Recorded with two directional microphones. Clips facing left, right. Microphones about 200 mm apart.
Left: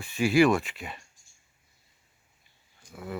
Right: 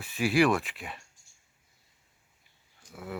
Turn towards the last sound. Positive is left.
turn(degrees=-5)  # may be behind; listen again after turning